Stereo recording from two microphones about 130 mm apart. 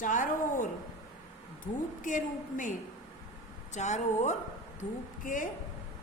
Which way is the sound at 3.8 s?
65° left (ahead or behind).